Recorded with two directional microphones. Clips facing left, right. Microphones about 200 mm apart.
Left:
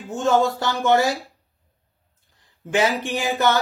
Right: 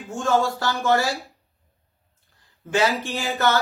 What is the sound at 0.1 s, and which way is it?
Speech, 20° left (ahead or behind).